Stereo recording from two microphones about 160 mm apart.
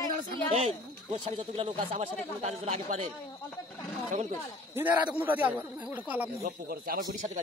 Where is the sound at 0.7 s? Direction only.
30° right (ahead or behind); by 3.1 s 45° right (ahead or behind).